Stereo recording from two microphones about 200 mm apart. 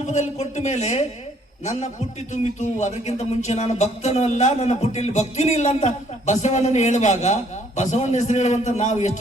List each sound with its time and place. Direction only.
0.1 s music: 35° left (ahead or behind)